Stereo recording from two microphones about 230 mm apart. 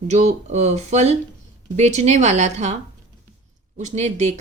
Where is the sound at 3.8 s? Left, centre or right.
Right.